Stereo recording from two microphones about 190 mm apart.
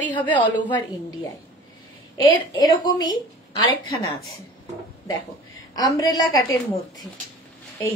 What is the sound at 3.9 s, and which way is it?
Speech, 90° left.